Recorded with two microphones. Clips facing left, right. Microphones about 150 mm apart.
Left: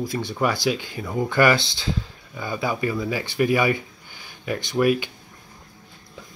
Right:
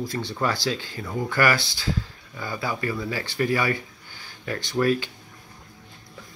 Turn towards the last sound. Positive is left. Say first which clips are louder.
# left 2 dB
turn(degrees=15)  # may be behind; listen again after turning